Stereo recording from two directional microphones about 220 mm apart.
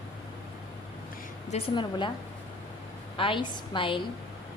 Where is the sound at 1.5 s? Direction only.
25° left (ahead or behind).